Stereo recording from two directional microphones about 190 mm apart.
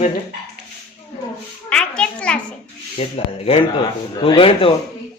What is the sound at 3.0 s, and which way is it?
Speech, 30° left (ahead or behind).